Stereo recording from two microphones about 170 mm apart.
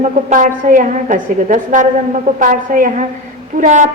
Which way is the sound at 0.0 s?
45° right (ahead or behind).